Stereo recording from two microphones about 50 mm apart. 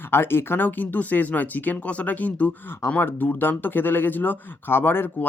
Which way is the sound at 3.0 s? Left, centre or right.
Left.